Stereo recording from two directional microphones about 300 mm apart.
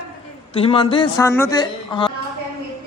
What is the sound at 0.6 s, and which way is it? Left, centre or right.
A man's voice, centre.